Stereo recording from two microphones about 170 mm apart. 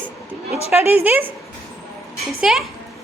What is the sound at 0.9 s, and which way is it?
Speech, 10° right (ahead or behind).